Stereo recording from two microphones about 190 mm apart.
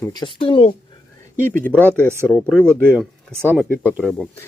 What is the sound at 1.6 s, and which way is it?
Speech, 10° left (ahead or behind).